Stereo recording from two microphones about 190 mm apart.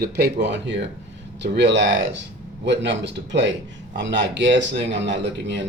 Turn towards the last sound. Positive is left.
turn(degrees=-65)  # may be behind; listen again after turning